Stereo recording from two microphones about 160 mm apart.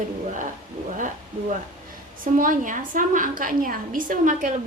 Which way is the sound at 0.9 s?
50° right (ahead or behind).